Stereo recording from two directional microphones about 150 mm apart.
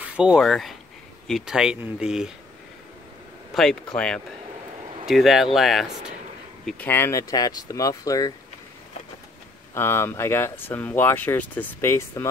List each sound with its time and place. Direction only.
0.0 s rub: 5° right (ahead or behind)
1.2 s speech: centre (ahead or behind)
3.5 s speech: 5° left (ahead or behind)
6.6 s speech: 10° left (ahead or behind)
9.8 s speech: 15° left (ahead or behind)